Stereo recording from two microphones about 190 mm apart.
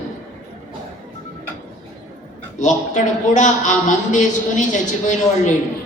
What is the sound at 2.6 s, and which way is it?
A man's voice, 40° left (ahead or behind).